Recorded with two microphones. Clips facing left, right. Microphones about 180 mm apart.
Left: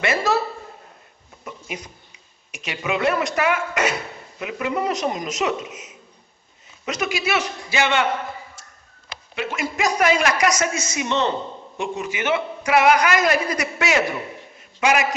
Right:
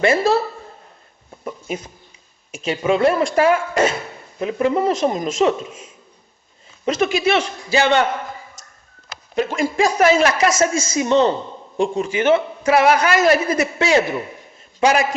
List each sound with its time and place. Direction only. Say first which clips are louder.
0.0 s a man's voice: right 5 dB; 30° right (ahead or behind)
2.5 s a man's voice: right 7 dB; 30° right (ahead or behind)
9.0 s a woman's voice: right 7 dB; 40° right (ahead or behind)
11.1 s a woman's voice: right 7 dB; 45° right (ahead or behind)
11.8 s a woman's voice: right 7 dB; 30° right (ahead or behind)